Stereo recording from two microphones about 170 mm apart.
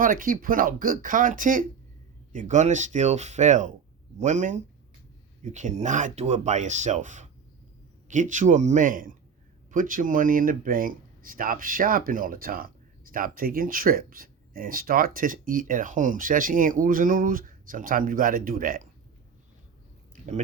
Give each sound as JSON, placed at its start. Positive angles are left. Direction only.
{"t": 0.0, "sound": "speech", "side_deg": -55}